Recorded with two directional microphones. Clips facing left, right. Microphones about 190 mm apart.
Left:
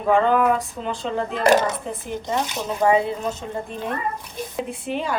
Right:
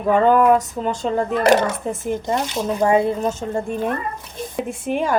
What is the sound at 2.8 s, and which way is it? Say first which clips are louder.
A woman's voice: right 2 dB; 45° right (ahead or behind).